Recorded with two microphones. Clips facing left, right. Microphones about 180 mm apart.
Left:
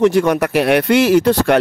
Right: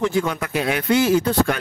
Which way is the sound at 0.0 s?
75° left (ahead or behind).